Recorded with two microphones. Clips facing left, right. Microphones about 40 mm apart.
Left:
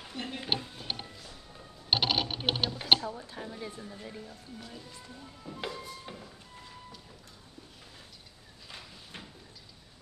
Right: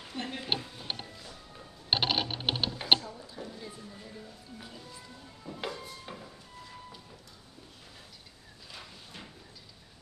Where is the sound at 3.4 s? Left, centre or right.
Left.